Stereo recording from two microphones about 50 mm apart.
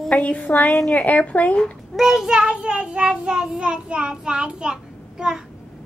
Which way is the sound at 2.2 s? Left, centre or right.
Centre.